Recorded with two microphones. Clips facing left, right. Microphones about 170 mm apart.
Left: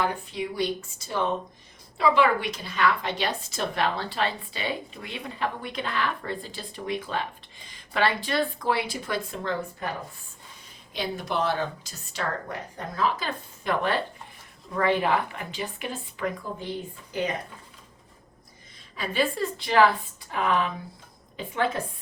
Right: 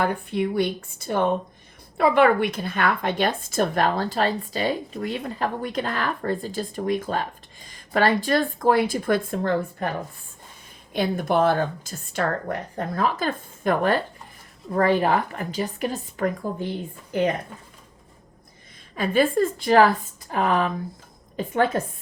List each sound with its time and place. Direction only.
0.0 s a woman's voice: 55° right (ahead or behind)
10.9 s a woman's voice: 50° right (ahead or behind)
18.9 s a woman's voice: 50° right (ahead or behind)